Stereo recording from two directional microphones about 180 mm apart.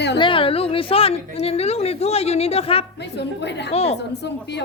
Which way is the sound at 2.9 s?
70° left (ahead or behind).